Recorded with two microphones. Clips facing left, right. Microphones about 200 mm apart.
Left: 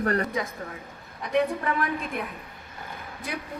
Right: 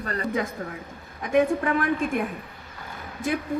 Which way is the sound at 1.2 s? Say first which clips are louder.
Right 4 dB; 50° right (ahead or behind).